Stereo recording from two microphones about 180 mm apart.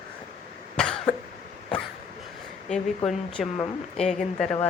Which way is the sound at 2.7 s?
Centre (ahead or behind).